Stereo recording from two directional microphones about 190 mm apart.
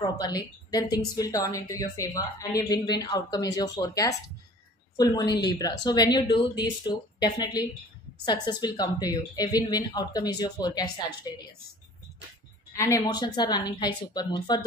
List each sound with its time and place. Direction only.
0.2 s a woman's voice: 20° left (ahead or behind)
12.7 s a woman's voice: 15° left (ahead or behind)